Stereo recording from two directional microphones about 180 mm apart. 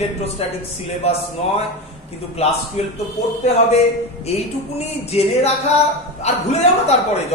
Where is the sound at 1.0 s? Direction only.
35° left (ahead or behind).